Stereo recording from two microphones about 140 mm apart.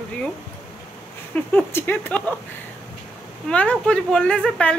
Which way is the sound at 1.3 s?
10° left (ahead or behind).